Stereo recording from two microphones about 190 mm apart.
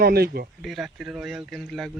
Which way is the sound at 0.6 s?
Centre (ahead or behind).